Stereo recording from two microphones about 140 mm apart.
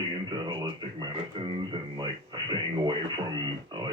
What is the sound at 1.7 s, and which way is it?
Radio, 35° right (ahead or behind).